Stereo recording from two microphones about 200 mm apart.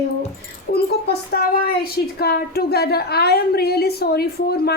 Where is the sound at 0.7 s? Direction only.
50° left (ahead or behind).